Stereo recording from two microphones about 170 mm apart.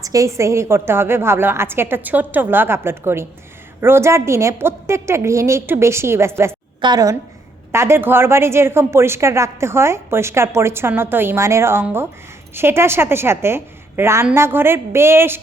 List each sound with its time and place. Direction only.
0.0 s a woman's voice: 20° right (ahead or behind)